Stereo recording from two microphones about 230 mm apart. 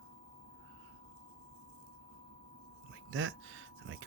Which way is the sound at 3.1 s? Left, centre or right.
Right.